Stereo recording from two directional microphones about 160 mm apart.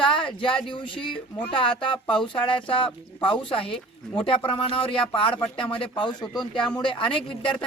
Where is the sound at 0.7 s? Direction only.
30° left (ahead or behind).